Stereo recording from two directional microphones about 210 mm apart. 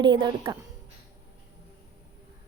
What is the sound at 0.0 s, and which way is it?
Speech, 25° right (ahead or behind).